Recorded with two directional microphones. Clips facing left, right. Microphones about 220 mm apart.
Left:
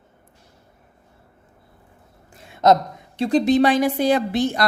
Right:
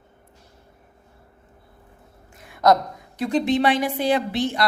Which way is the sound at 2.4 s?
25° left (ahead or behind).